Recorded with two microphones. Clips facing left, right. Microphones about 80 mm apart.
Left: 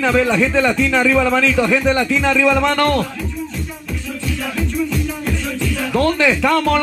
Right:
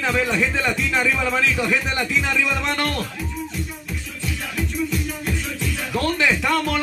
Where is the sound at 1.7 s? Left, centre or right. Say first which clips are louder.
Left 7 dB; left.